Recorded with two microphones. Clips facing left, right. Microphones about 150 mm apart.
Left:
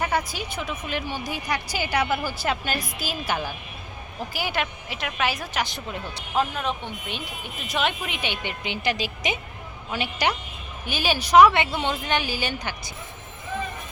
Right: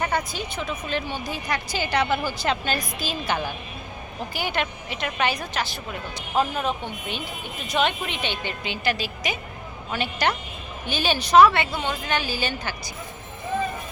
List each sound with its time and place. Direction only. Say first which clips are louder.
0.0 s a woman's voice: even; 10° left (ahead or behind)
5.6 s speech: even; 20° left (ahead or behind)
6.3 s a woman's voice: right 2 dB; 5° right (ahead or behind); by 12.9 s 15° left (ahead or behind)